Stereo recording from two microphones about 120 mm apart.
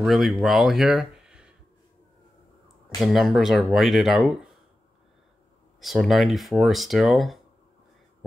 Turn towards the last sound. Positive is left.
turn(degrees=0)  # may be behind; listen again after turning